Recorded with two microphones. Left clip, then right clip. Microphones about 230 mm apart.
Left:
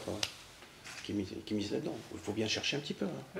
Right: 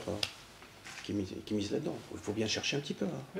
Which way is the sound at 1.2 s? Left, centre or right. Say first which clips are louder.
Right 1 dB; centre.